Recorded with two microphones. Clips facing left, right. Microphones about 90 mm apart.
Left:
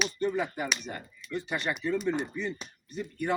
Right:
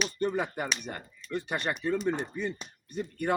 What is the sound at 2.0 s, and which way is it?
Speech, 40° right (ahead or behind).